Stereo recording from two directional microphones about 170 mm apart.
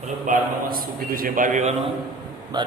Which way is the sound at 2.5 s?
25° right (ahead or behind).